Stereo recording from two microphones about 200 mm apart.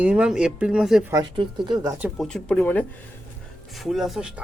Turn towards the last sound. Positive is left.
turn(degrees=-5)  # may be behind; listen again after turning